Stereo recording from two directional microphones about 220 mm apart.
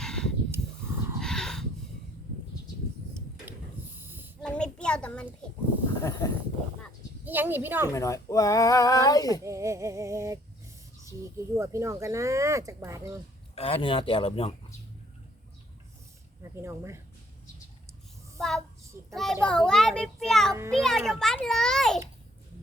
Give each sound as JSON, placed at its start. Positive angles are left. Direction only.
{"t": 0.0, "sound": "a sound", "side_deg": 5}
{"t": 3.9, "sound": "a sound", "side_deg": -10}
{"t": 4.4, "sound": "a sound", "side_deg": 5}
{"t": 6.0, "sound": "speech", "side_deg": 15}
{"t": 7.3, "sound": "speech", "side_deg": -10}
{"t": 7.9, "sound": "speech", "side_deg": 15}
{"t": 9.4, "sound": "speech", "side_deg": -15}
{"t": 13.6, "sound": "speech", "side_deg": 25}
{"t": 16.4, "sound": "speech", "side_deg": -10}
{"t": 18.3, "sound": "a child's voice", "side_deg": 0}